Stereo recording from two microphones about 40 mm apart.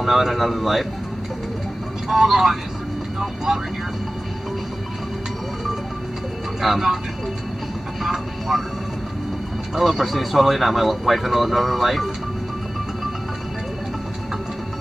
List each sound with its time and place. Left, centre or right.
0.0 s speech: centre
2.0 s speech: centre
6.6 s speech: centre
8.0 s vehicle: centre
9.8 s speech: centre